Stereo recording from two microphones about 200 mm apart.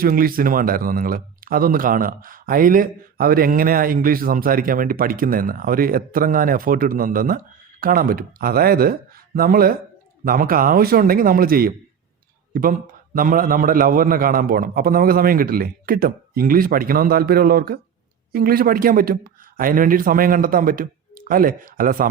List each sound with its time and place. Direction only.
0.0 s speech: 45° right (ahead or behind)